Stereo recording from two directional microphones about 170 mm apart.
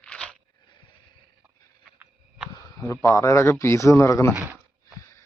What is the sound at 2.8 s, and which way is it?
A man's voice, 20° left (ahead or behind).